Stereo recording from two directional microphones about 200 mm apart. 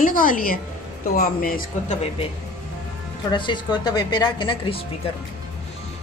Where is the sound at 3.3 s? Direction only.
20° left (ahead or behind).